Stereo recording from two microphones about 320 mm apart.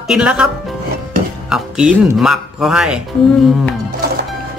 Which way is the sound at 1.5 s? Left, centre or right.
Centre.